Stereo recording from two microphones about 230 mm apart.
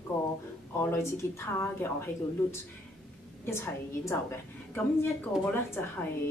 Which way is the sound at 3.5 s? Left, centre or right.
Centre.